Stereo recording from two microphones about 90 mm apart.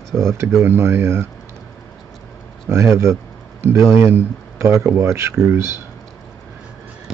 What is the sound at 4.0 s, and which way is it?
Speech, 25° right (ahead or behind).